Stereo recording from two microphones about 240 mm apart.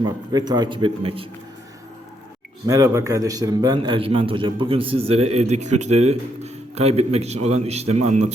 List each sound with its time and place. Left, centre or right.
0.3 s a man's voice: centre
2.6 s a man's voice: centre